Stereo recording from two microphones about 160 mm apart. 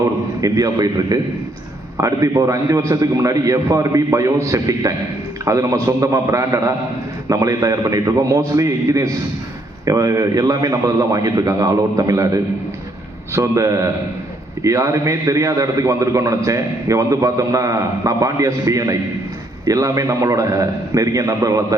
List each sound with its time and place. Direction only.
0.4 s a man's voice: 25° right (ahead or behind)